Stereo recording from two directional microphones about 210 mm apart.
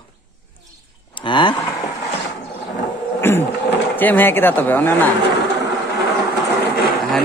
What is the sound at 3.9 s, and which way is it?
Speech, 10° left (ahead or behind).